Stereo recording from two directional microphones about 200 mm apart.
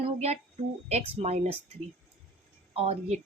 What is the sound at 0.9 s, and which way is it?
Speech, 30° right (ahead or behind).